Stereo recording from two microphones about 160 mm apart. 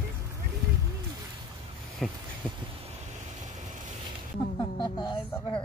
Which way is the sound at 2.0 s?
Centre (ahead or behind).